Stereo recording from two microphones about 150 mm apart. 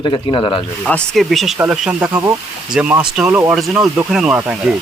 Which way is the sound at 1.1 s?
Centre (ahead or behind).